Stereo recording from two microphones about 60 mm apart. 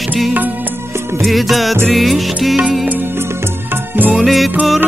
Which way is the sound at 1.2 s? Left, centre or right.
Centre.